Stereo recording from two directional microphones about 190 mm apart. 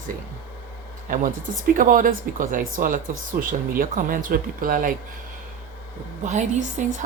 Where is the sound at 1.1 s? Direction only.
45° right (ahead or behind).